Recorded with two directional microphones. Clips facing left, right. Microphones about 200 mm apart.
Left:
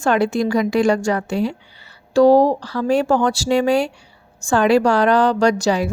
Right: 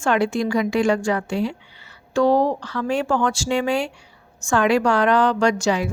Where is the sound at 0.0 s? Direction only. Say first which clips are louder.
Left 3 dB; 40° left (ahead or behind).